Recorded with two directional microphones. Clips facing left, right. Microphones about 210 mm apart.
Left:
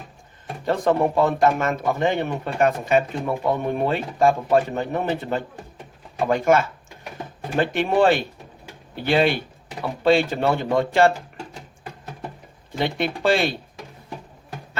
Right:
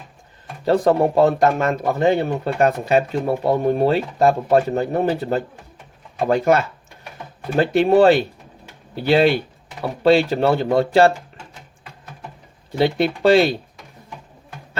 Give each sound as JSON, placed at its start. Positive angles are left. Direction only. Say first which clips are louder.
{"t": 0.6, "sound": "speech", "louder": "right 4 dB", "side_deg": -35}
{"t": 12.8, "sound": "speech", "louder": "right 6 dB", "side_deg": -40}